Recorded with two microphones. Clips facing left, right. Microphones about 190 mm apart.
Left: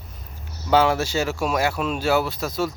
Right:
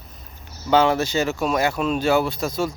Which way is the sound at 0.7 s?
5° left (ahead or behind).